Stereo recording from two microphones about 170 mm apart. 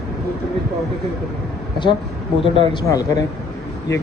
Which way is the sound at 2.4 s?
30° left (ahead or behind).